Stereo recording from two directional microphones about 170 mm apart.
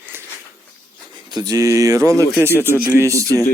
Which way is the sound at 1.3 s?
20° right (ahead or behind).